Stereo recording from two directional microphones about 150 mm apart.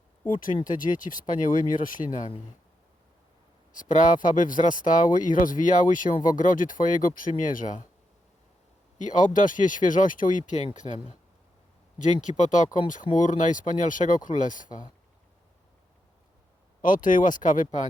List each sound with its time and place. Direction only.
0.5 s speech: 60° left (ahead or behind)
3.7 s speech: 60° left (ahead or behind)
9.0 s speech: 55° left (ahead or behind)
12.4 s speech: 55° left (ahead or behind)
16.8 s speech: 60° left (ahead or behind)